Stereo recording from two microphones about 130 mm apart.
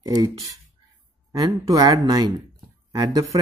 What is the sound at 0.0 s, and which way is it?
Speech, 30° right (ahead or behind).